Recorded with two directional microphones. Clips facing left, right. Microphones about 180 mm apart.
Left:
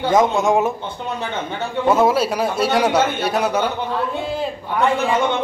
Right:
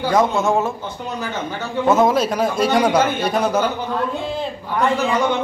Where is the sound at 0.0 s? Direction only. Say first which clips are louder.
Left 1 dB; 20° left (ahead or behind).